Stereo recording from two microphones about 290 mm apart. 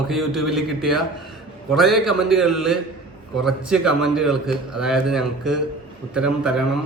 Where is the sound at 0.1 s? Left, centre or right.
Centre.